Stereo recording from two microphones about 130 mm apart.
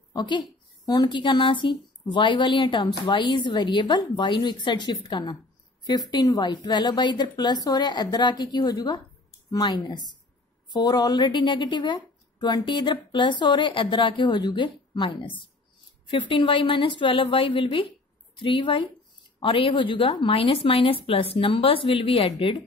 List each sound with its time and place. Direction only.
0.1 s a woman's voice: 35° left (ahead or behind)